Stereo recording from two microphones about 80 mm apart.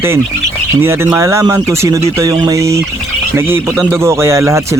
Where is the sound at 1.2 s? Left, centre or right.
Right.